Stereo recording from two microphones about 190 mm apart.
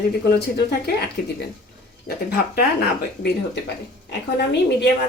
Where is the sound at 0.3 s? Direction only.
60° left (ahead or behind).